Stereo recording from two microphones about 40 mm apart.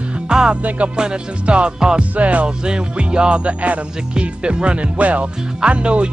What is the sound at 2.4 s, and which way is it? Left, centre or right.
Speech, right.